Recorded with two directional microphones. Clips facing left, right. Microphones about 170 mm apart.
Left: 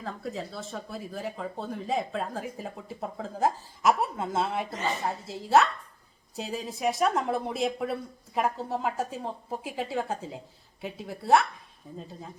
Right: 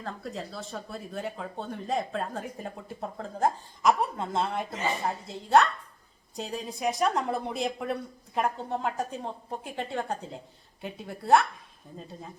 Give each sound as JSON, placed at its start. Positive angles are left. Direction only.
{"t": 0.0, "sound": "speech", "side_deg": 0}